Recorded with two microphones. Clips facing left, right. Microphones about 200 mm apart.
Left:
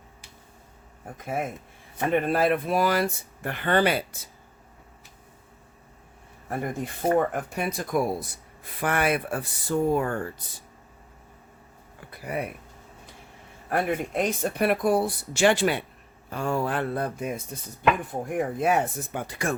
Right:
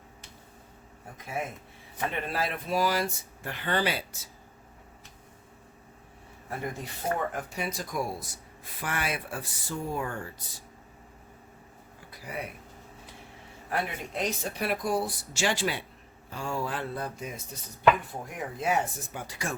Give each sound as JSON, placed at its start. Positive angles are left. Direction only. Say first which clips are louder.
{"t": 1.2, "sound": "speech", "louder": "left 5 dB", "side_deg": 50}
{"t": 6.5, "sound": "speech", "louder": "left 5 dB", "side_deg": 50}
{"t": 12.1, "sound": "speech", "louder": "left 7 dB", "side_deg": 55}
{"t": 13.7, "sound": "speech", "louder": "left 7 dB", "side_deg": 50}